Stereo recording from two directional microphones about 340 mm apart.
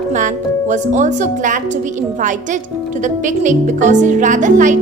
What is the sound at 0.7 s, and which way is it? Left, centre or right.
Speech, right.